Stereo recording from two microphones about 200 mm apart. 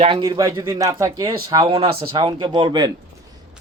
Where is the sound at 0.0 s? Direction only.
20° right (ahead or behind).